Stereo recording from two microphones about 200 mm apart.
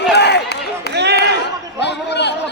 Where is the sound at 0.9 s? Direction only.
55° right (ahead or behind).